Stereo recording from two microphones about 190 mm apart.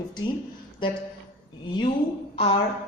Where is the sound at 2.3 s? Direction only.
30° left (ahead or behind).